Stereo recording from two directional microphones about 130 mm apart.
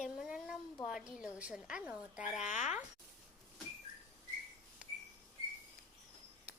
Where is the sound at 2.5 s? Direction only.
65° left (ahead or behind).